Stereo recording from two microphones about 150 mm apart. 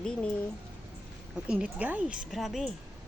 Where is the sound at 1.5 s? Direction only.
10° right (ahead or behind).